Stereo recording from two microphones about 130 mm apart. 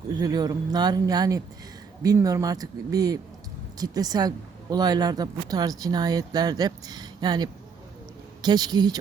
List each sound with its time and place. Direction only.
0.1 s speech: 30° right (ahead or behind)